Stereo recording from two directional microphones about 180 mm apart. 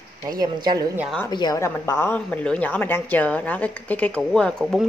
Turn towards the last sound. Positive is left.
turn(degrees=0)  # may be behind; listen again after turning